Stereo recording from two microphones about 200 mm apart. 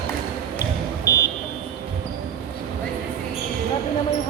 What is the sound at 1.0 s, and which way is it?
Vehicle, 15° left (ahead or behind).